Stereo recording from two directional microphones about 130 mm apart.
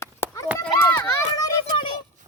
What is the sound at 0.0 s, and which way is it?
Run, 20° left (ahead or behind).